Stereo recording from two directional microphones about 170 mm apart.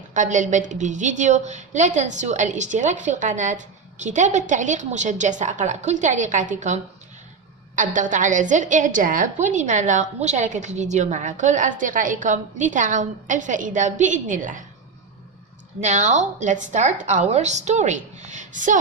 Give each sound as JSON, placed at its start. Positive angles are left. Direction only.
{"t": 0.1, "sound": "a woman's voice", "side_deg": -45}
{"t": 15.8, "sound": "a woman's voice", "side_deg": -45}